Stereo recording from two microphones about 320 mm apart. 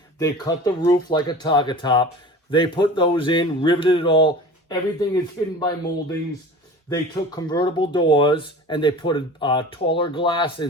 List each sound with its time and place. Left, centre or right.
0.2 s speech: centre
6.9 s speech: centre